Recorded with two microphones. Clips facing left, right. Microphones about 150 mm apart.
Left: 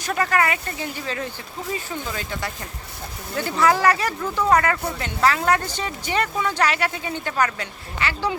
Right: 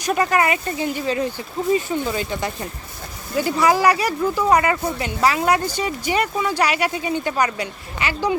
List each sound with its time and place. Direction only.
0.0 s speech: 15° right (ahead or behind)